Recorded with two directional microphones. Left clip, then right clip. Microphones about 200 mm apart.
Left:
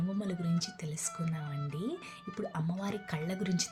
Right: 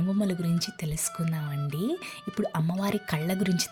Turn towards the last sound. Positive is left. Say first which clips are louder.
# right 7 dB
turn(degrees=-45)  # may be behind; listen again after turning